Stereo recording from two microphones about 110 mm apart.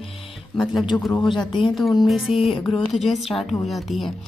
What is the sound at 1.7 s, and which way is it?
Speech, centre (ahead or behind).